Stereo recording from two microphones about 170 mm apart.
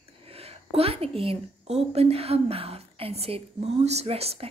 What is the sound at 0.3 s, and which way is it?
A woman's voice, 35° right (ahead or behind).